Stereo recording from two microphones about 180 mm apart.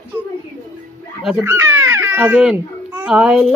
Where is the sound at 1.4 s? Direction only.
15° right (ahead or behind).